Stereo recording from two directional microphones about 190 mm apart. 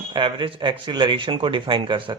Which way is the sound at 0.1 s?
25° right (ahead or behind).